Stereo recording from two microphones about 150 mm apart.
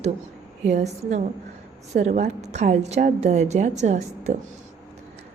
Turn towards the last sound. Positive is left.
turn(degrees=-50)  # may be behind; listen again after turning